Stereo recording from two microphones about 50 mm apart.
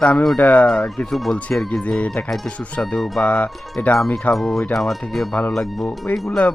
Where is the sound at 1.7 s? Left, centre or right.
Centre.